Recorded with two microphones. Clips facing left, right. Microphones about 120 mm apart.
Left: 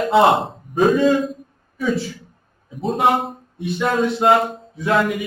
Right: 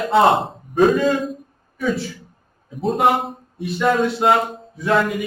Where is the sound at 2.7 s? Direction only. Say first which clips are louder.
Even; centre (ahead or behind).